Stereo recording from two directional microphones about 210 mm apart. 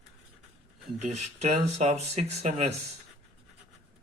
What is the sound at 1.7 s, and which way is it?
Speech, 30° right (ahead or behind).